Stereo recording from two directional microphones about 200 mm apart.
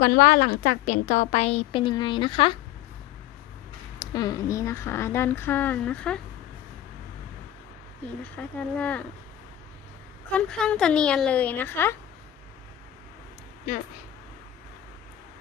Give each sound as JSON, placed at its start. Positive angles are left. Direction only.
{"t": 0.0, "sound": "a woman's voice", "side_deg": 45}
{"t": 4.0, "sound": "speech", "side_deg": 20}
{"t": 8.2, "sound": "speech", "side_deg": 5}
{"t": 10.3, "sound": "a woman's voice", "side_deg": 5}